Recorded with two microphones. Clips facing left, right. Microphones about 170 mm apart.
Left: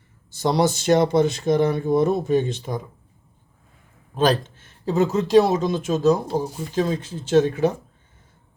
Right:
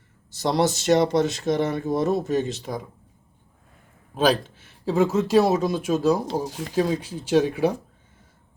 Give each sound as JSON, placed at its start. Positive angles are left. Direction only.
{"t": 0.3, "sound": "speech", "side_deg": 0}
{"t": 4.1, "sound": "speech", "side_deg": -5}
{"t": 6.4, "sound": "speech", "side_deg": -90}
{"t": 6.7, "sound": "speech", "side_deg": -10}